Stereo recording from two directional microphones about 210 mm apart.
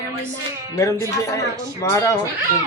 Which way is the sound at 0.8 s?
15° left (ahead or behind).